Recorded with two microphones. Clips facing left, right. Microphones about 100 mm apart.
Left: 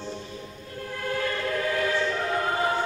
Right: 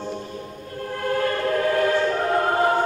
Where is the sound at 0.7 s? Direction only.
45° right (ahead or behind).